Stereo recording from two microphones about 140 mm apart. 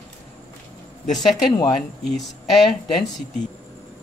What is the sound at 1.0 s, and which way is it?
Speech, centre (ahead or behind).